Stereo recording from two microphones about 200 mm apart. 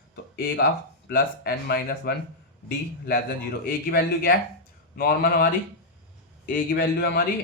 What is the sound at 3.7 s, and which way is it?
Speech, 50° left (ahead or behind).